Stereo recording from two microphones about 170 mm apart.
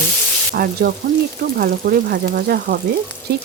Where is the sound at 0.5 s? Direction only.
60° right (ahead or behind).